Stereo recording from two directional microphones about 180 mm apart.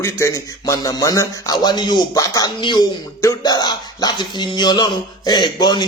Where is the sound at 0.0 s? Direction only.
15° left (ahead or behind).